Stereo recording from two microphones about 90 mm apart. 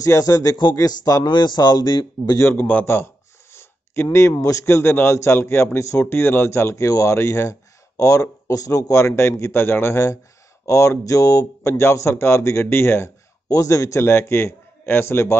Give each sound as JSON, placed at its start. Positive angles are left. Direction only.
{"t": 0.0, "sound": "speech", "side_deg": 40}
{"t": 2.3, "sound": "speech", "side_deg": 25}
{"t": 13.5, "sound": "speech", "side_deg": 40}